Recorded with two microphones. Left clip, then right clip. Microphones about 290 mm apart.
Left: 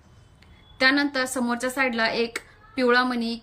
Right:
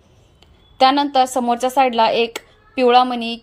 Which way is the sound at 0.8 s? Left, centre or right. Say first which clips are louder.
Right 8 dB; centre.